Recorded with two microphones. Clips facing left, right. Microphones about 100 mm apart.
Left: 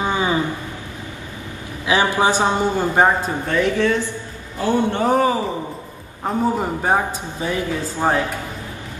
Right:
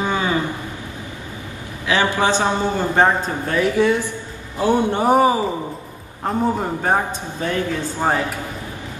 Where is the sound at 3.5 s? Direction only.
10° right (ahead or behind).